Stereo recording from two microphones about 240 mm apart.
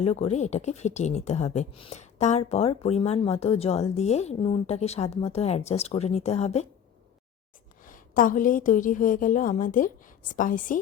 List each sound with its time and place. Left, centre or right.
0.0 s speech: left
7.9 s a woman's voice: left